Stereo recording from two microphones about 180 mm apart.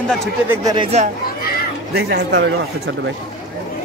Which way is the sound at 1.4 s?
55° left (ahead or behind).